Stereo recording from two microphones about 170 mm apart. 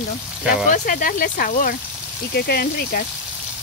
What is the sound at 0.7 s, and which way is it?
Speech, 50° left (ahead or behind).